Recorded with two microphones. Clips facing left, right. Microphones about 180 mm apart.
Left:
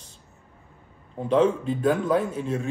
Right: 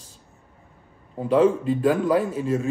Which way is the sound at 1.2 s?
5° right (ahead or behind).